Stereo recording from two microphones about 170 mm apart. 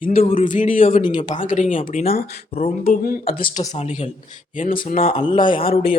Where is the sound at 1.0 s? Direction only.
45° left (ahead or behind).